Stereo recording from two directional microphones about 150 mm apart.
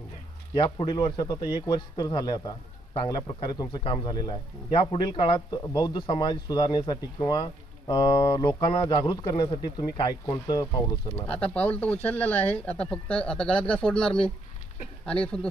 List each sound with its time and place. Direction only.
0.6 s a man's voice: 35° left (ahead or behind)
11.5 s speech: 10° left (ahead or behind)